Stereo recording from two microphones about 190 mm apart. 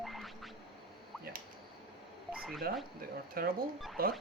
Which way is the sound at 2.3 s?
Centre (ahead or behind).